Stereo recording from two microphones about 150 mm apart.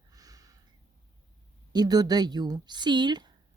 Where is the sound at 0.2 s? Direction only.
25° right (ahead or behind).